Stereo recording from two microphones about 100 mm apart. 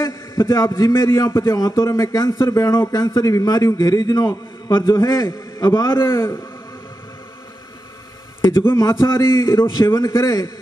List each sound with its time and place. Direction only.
0.0 s a man's voice: 30° left (ahead or behind)
5.9 s a man's voice: 25° left (ahead or behind)
8.7 s a man's voice: 30° left (ahead or behind)